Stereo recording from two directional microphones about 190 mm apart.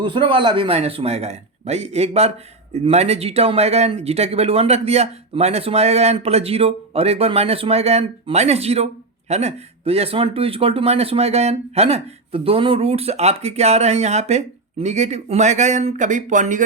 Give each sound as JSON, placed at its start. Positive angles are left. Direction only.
{"t": 0.0, "sound": "speech", "side_deg": -25}